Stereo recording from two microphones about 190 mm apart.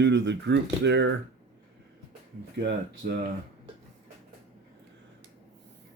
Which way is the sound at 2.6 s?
60° right (ahead or behind).